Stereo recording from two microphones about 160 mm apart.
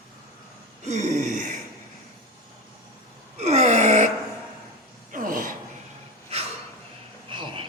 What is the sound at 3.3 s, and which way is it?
Gasp, 40° right (ahead or behind).